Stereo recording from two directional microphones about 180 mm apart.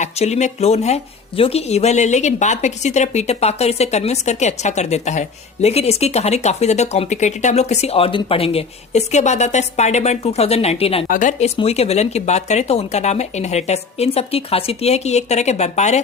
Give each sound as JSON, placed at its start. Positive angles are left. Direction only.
{"t": 0.0, "sound": "speech", "side_deg": 40}